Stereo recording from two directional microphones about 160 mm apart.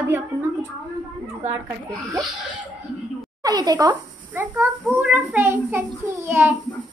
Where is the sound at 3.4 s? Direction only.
25° right (ahead or behind).